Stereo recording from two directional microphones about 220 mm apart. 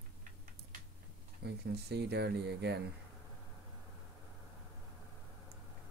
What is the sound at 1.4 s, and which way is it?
Speech, 50° right (ahead or behind).